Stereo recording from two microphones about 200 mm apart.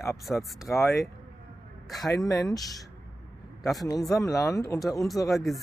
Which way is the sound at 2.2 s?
15° left (ahead or behind).